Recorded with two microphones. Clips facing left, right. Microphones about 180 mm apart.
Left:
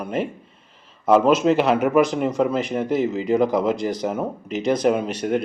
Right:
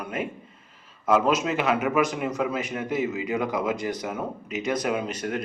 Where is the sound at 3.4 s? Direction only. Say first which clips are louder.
Left 8 dB; 35° left (ahead or behind).